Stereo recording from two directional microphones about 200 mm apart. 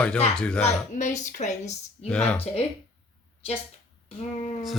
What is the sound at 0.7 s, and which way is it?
Speech, 35° left (ahead or behind).